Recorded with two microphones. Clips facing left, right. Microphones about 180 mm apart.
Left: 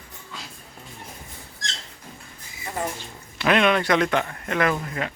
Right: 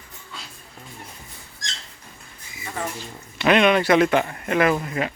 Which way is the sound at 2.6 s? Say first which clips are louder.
Left 1 dB; 25° left (ahead or behind).